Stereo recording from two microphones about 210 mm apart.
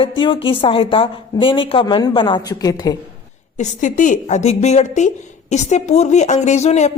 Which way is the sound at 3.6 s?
35° left (ahead or behind).